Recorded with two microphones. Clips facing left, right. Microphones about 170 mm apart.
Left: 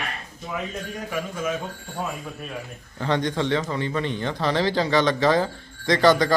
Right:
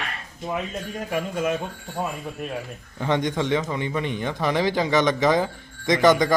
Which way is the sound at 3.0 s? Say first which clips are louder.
Even; 20° right (ahead or behind).